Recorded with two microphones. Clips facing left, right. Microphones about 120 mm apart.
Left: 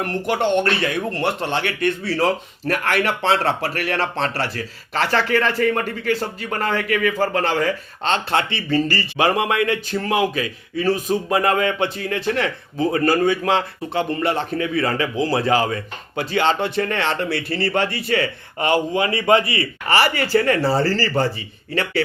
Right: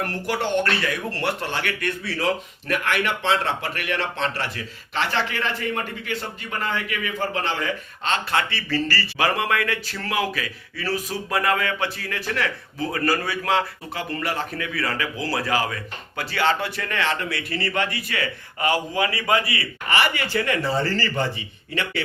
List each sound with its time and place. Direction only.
0.0 s speech: 20° left (ahead or behind)
2.2 s speech: 40° left (ahead or behind)